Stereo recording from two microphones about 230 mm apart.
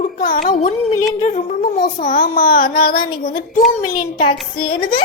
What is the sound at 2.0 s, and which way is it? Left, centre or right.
A child's voice, left.